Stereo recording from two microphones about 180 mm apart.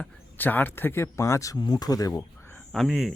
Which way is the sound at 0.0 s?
10° left (ahead or behind).